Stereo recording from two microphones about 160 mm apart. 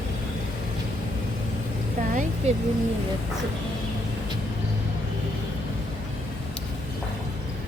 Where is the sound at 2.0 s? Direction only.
55° right (ahead or behind).